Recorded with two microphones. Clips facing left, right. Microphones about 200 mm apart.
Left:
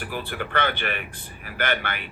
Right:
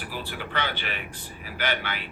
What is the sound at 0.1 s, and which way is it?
Speech, 55° left (ahead or behind).